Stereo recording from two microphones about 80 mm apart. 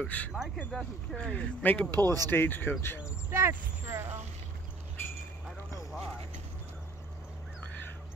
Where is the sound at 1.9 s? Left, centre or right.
Right.